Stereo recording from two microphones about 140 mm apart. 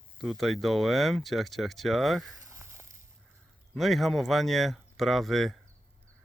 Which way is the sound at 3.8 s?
Centre (ahead or behind).